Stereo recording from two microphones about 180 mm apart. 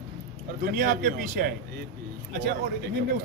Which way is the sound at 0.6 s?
50° right (ahead or behind).